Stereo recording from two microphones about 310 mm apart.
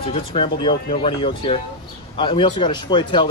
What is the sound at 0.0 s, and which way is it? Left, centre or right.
Speech, centre.